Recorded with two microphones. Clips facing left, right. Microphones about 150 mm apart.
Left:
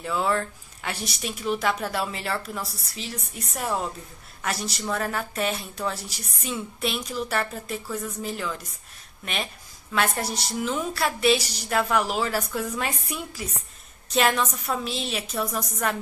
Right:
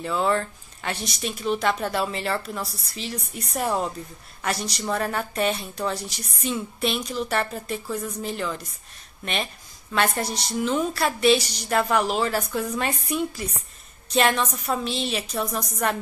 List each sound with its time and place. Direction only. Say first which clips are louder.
0.0 s speech: right 2 dB; 5° left (ahead or behind)